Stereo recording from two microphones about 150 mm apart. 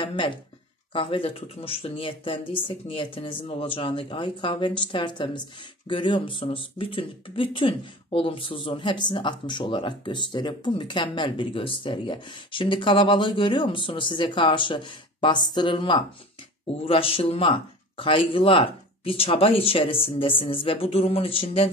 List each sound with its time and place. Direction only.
0.0 s speech: 35° left (ahead or behind)